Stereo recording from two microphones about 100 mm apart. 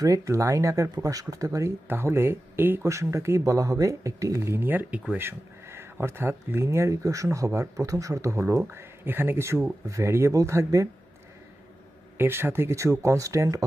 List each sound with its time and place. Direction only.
0.0 s speech: 30° right (ahead or behind)
12.2 s speech: 25° right (ahead or behind)